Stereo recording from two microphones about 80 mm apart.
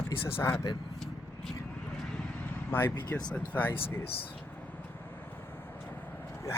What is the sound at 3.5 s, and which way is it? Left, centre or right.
Speech, left.